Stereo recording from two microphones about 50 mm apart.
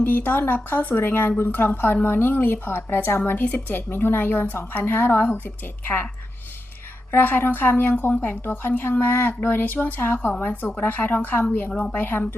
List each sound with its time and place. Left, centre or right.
0.0 s a woman's voice: left
7.1 s a woman's voice: left
10.4 s a woman's voice: left